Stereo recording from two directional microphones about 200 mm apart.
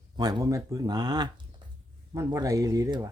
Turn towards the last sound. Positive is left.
turn(degrees=-15)  # may be behind; listen again after turning